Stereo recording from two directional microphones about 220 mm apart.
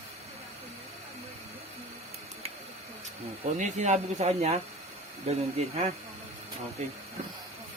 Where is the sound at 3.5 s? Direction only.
35° right (ahead or behind).